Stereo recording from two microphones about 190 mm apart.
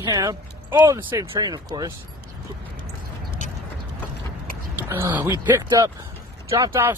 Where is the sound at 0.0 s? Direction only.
20° right (ahead or behind).